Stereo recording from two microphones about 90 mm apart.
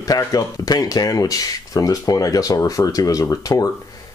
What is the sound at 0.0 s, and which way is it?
Speech, 40° left (ahead or behind).